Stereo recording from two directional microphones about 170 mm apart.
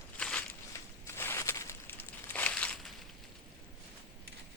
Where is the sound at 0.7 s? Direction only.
15° left (ahead or behind).